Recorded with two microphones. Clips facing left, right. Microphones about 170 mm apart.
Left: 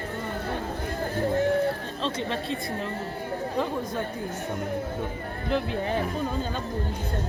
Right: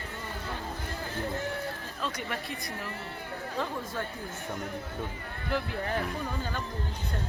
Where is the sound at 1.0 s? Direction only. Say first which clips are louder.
Left 10 dB; 40° left (ahead or behind).